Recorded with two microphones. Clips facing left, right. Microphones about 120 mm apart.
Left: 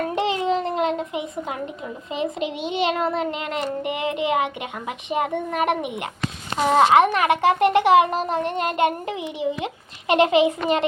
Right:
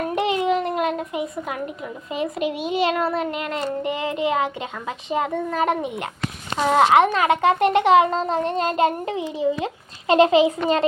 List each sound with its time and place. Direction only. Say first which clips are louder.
0.2 s a child's voice: right 2 dB; 30° left (ahead or behind)
7.0 s a child's voice: even; 25° right (ahead or behind)